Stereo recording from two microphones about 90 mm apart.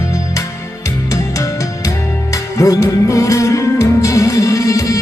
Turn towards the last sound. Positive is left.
turn(degrees=35)  # may be behind; listen again after turning